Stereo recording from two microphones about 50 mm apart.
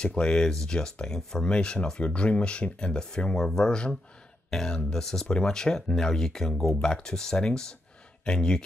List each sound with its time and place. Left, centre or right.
0.0 s speech: centre